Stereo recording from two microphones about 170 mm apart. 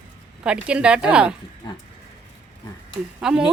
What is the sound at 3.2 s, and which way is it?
Speech, 5° right (ahead or behind).